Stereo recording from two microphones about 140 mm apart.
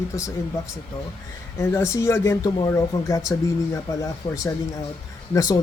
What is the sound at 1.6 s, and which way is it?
Speech, 15° left (ahead or behind).